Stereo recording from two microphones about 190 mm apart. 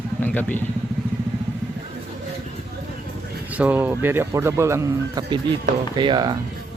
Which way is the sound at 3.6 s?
10° right (ahead or behind).